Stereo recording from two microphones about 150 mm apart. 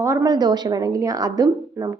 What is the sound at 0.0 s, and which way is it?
A woman's voice, 20° right (ahead or behind).